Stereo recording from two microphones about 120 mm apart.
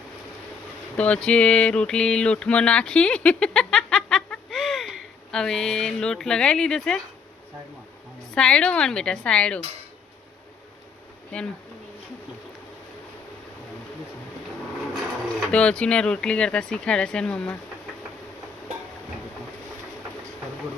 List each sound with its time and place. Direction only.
0.9 s a sound: 10° left (ahead or behind)
8.4 s speech: 5° left (ahead or behind)
15.4 s speech: 5° left (ahead or behind)